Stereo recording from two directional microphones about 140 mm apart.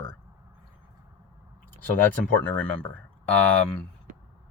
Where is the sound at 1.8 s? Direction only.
10° left (ahead or behind).